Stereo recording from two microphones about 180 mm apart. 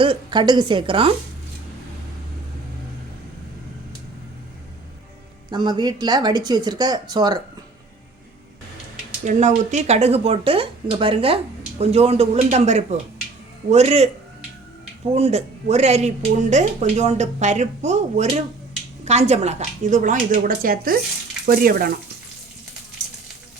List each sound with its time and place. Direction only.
0.0 s speech: 25° right (ahead or behind)
5.5 s speech: 25° right (ahead or behind)
9.2 s speech: 40° right (ahead or behind)
15.1 s speech: 35° right (ahead or behind); by 21.9 s 55° right (ahead or behind)